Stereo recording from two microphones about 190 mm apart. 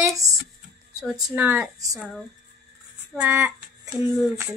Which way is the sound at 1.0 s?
10° right (ahead or behind).